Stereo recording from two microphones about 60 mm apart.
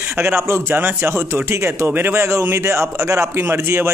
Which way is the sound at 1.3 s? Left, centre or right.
Right.